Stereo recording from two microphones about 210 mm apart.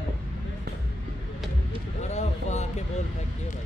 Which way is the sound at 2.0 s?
35° left (ahead or behind).